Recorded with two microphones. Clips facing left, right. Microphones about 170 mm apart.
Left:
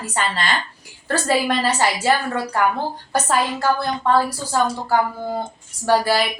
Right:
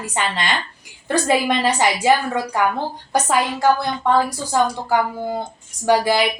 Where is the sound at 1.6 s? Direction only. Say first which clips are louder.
Right 2 dB; 15° right (ahead or behind).